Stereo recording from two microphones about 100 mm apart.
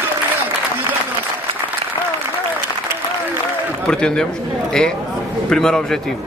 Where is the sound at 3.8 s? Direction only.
10° left (ahead or behind).